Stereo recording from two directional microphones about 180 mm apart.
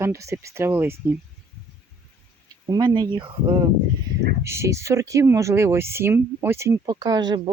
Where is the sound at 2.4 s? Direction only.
20° right (ahead or behind).